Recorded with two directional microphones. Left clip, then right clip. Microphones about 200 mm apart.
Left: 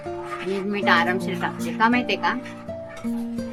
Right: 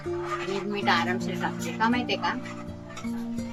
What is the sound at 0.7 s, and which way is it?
A woman's voice, 15° left (ahead or behind).